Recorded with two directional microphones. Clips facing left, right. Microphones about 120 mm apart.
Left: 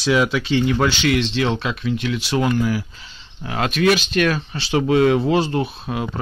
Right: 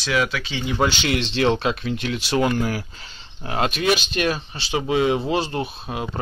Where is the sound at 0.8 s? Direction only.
30° right (ahead or behind).